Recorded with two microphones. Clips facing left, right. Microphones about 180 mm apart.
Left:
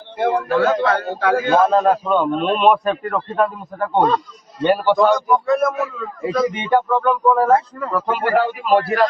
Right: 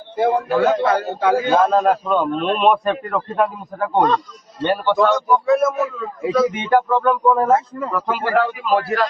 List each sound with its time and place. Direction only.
0.2 s a man's voice: centre (ahead or behind)
0.9 s a man's voice: 20° right (ahead or behind)
1.5 s a man's voice: centre (ahead or behind)
7.4 s a man's voice: 20° right (ahead or behind)
7.9 s a man's voice: centre (ahead or behind)